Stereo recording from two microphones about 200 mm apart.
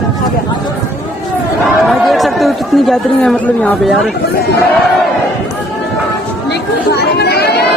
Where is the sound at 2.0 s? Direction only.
Centre (ahead or behind).